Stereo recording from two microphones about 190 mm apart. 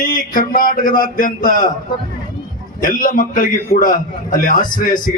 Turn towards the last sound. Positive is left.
turn(degrees=45)  # may be behind; listen again after turning